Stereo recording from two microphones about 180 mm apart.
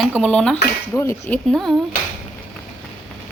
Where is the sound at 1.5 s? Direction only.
Centre (ahead or behind).